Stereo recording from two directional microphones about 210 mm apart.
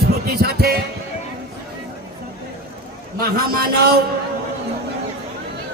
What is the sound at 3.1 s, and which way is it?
Speech, 45° right (ahead or behind).